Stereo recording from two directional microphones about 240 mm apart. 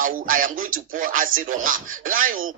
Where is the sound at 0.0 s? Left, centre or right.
Right.